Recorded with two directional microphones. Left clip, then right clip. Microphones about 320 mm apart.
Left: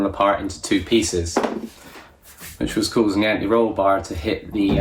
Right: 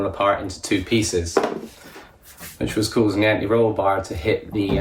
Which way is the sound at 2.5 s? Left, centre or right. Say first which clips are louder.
Left 1 dB; centre.